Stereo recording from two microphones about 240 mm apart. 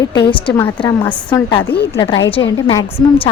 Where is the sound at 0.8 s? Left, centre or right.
Centre.